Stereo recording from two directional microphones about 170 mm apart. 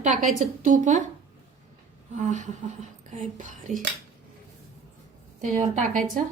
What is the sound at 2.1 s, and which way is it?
Speech, 45° right (ahead or behind).